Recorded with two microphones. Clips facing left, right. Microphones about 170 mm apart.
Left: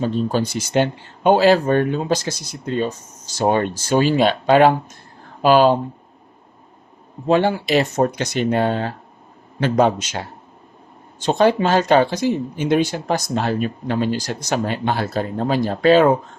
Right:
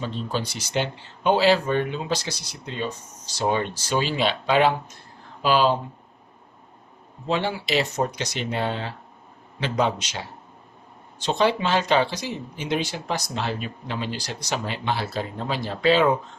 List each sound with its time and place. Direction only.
0.0 s speech: 45° left (ahead or behind)
7.3 s speech: 50° left (ahead or behind)